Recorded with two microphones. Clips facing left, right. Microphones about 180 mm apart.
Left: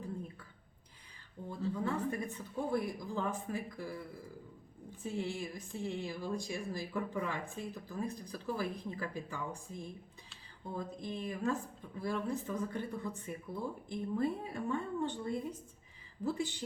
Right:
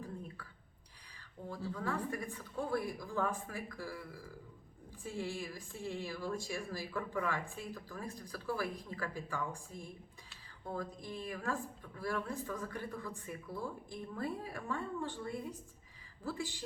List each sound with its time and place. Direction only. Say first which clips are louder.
1.5 s a woman's voice: left 3 dB; 20° left (ahead or behind)